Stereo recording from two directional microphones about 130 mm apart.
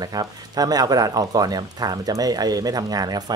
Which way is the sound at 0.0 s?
30° right (ahead or behind).